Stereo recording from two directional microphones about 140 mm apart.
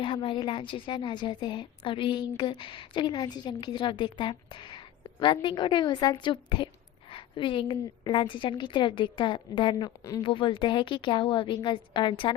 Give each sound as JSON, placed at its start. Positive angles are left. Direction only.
{"t": 0.0, "sound": "a woman's voice", "side_deg": 40}
{"t": 10.2, "sound": "a woman's voice", "side_deg": 35}